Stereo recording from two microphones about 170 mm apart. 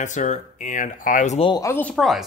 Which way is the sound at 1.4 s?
30° left (ahead or behind).